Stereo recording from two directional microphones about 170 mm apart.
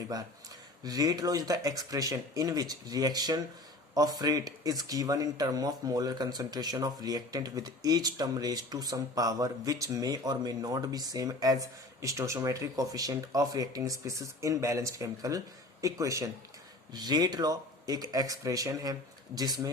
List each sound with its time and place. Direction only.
0.1 s speech: 20° right (ahead or behind)